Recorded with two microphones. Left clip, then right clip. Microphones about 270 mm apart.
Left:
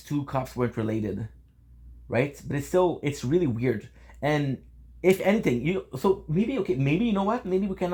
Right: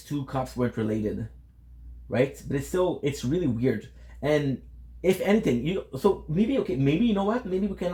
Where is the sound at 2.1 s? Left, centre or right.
Left.